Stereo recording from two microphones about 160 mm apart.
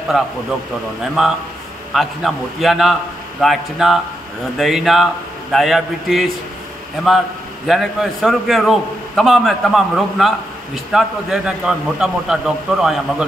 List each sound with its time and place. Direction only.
0.1 s a man's voice: 5° right (ahead or behind)
7.6 s a man's voice: centre (ahead or behind)